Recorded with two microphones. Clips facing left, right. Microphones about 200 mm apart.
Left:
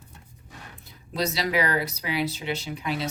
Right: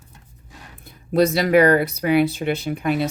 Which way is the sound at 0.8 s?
55° right (ahead or behind).